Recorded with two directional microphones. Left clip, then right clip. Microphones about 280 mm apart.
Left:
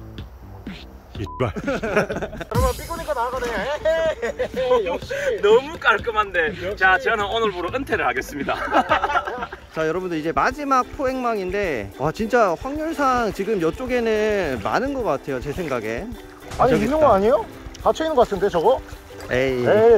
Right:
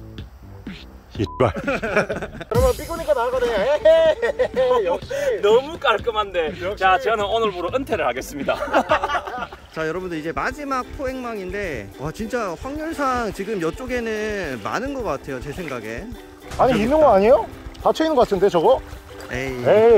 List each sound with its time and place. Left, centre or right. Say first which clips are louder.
1.2 s speech: right 5 dB; centre
3.2 s speech: right 4 dB; right
9.8 s speech: left 2 dB; centre
16.9 s speech: right 5 dB; right
19.3 s speech: left 7 dB; centre
19.6 s speech: right 2 dB; right